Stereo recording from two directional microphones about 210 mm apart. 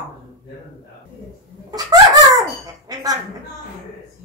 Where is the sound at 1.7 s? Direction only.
15° right (ahead or behind).